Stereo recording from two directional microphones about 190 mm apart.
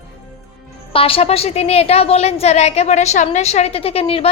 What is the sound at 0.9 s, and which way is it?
A woman's voice, 30° left (ahead or behind).